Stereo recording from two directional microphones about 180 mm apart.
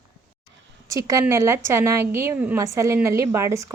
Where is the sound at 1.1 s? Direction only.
15° right (ahead or behind).